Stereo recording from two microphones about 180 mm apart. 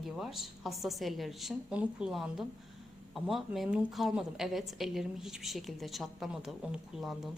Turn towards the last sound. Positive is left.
turn(degrees=0)  # may be behind; listen again after turning